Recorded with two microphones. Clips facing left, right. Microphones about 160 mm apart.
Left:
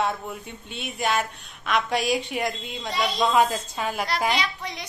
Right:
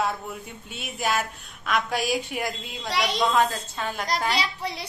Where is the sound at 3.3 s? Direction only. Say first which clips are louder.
Left 2 dB; 10° left (ahead or behind).